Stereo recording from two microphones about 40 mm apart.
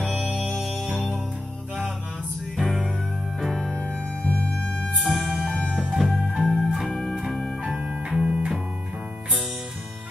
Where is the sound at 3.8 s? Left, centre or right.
Left.